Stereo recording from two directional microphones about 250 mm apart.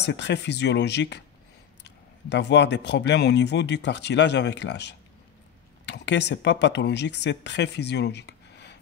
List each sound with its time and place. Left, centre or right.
0.0 s speech: left
2.2 s speech: left